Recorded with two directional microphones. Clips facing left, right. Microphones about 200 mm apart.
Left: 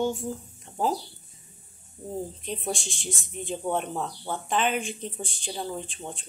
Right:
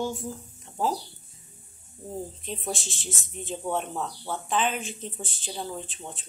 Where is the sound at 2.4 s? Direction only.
Centre (ahead or behind).